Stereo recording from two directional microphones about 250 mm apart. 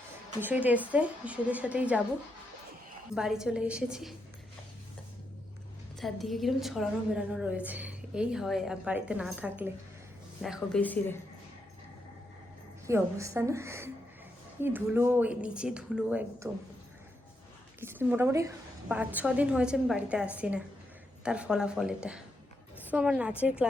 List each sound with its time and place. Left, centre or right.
0.4 s a woman's voice: centre
3.2 s a woman's voice: centre
6.0 s a woman's voice: centre
12.9 s a woman's voice: centre
17.7 s a woman's voice: centre